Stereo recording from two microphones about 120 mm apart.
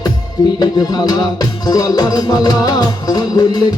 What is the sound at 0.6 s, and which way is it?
Music, 30° left (ahead or behind).